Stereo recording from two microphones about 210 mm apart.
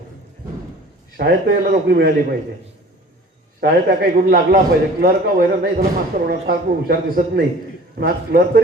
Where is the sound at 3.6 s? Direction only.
50° right (ahead or behind).